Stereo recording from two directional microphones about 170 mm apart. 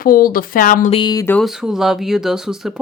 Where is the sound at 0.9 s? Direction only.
25° left (ahead or behind).